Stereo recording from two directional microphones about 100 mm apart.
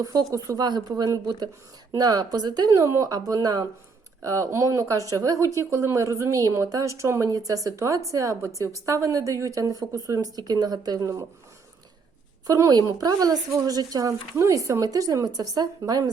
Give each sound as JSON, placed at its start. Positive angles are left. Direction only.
{"t": 0.0, "sound": "speech", "side_deg": -40}
{"t": 12.5, "sound": "speech", "side_deg": -35}